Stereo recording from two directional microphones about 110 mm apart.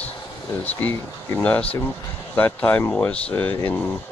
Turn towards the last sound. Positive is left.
turn(degrees=15)  # may be behind; listen again after turning